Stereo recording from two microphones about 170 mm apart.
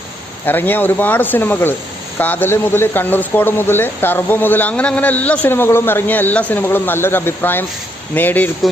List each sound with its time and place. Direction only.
0.4 s speech: 10° left (ahead or behind)